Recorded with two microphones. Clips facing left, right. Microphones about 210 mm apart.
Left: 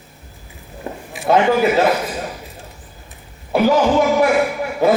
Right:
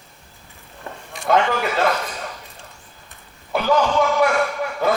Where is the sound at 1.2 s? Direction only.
20° left (ahead or behind).